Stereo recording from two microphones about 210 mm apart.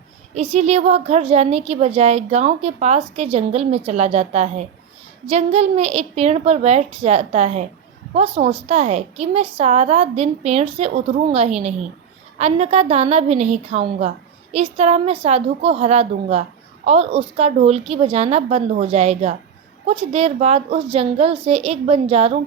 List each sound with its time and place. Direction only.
0.5 s a woman's voice: 30° right (ahead or behind)